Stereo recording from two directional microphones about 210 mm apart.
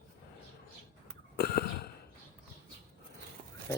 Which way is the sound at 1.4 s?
45° left (ahead or behind).